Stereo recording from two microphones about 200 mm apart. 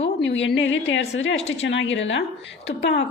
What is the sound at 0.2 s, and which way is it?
A woman's voice, 65° left (ahead or behind).